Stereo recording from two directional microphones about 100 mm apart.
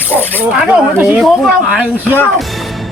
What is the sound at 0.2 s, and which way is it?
Snake, 20° left (ahead or behind).